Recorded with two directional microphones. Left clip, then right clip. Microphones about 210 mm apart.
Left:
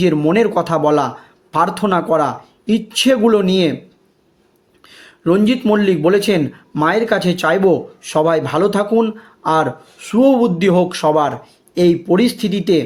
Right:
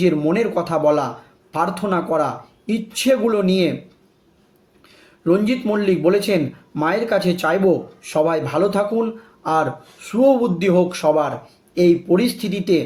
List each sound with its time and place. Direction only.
0.0 s speech: 40° left (ahead or behind)
5.2 s speech: 40° left (ahead or behind)